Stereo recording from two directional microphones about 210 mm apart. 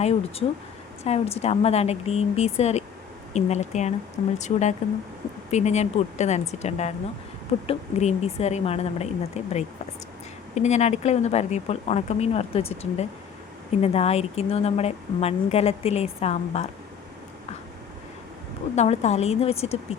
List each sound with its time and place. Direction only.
0.0 s a woman's voice: 30° left (ahead or behind)
18.8 s a woman's voice: 30° left (ahead or behind)